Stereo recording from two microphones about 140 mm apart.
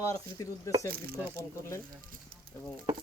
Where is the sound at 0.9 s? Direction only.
90° right.